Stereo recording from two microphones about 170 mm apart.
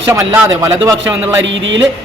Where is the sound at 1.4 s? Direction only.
90° right.